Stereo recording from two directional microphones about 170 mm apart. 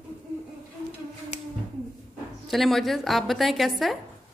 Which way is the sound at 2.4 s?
Centre (ahead or behind).